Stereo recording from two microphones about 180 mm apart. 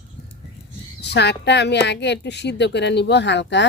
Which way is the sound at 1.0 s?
70° left (ahead or behind).